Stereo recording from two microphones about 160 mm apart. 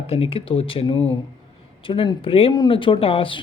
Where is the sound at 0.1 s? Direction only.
35° left (ahead or behind).